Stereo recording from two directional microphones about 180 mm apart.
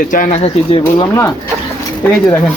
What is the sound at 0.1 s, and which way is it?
Speech, 45° left (ahead or behind).